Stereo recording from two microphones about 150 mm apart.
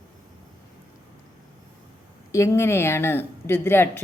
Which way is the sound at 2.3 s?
20° left (ahead or behind).